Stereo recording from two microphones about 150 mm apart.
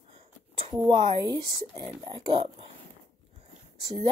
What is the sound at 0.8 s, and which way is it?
Speech, 30° right (ahead or behind).